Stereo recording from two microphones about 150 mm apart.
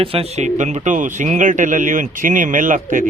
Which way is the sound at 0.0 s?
40° right (ahead or behind).